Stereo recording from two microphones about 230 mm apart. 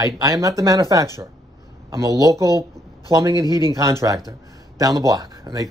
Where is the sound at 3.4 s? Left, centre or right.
Centre.